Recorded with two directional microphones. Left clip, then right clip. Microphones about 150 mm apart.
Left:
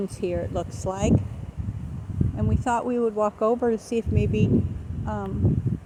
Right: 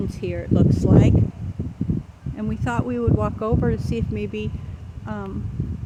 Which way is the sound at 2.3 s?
10° right (ahead or behind).